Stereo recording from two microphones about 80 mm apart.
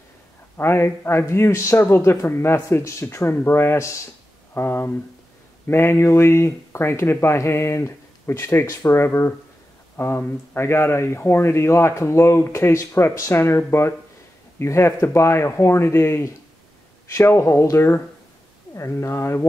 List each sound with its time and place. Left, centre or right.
0.6 s speech: left